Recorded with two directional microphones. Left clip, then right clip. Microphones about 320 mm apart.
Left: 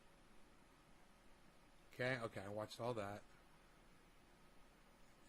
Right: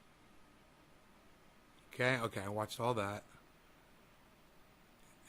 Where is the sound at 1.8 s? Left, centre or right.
Centre.